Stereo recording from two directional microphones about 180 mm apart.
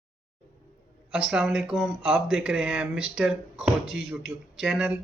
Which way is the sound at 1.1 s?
5° right (ahead or behind).